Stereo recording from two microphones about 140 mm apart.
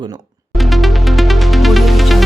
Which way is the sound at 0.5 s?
Centre (ahead or behind).